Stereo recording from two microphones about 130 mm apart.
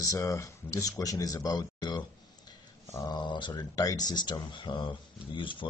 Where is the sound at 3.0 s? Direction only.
35° left (ahead or behind).